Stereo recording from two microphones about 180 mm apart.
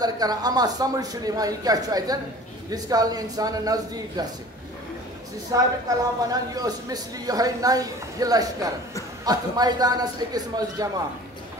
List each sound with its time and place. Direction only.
0.0 s a woman's voice: 20° right (ahead or behind)
5.5 s a woman's voice: 20° right (ahead or behind)